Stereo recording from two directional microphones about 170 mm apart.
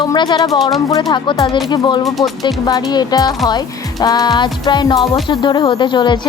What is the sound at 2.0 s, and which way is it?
Speech, centre (ahead or behind).